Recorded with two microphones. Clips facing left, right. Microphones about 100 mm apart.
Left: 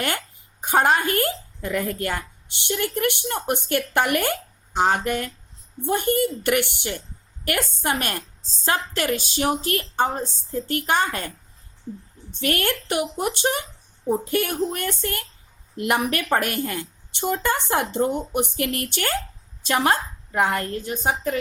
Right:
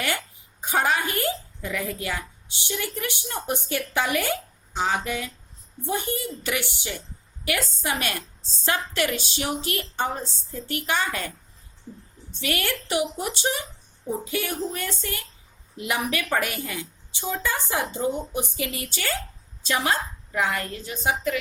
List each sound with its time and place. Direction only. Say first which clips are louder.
0.6 s a woman's voice: left 4 dB; 50° left (ahead or behind)
12.3 s a woman's voice: left 4 dB; 50° left (ahead or behind)
19.6 s a woman's voice: left 4 dB; 50° left (ahead or behind)